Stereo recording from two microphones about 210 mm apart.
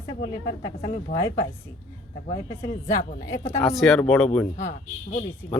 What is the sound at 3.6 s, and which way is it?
Speech, centre (ahead or behind).